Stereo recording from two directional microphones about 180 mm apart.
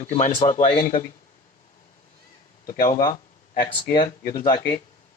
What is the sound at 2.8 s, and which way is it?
Speech, 45° left (ahead or behind).